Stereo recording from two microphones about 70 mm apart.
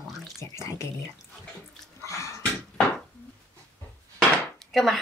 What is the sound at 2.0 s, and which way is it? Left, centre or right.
Dog, left.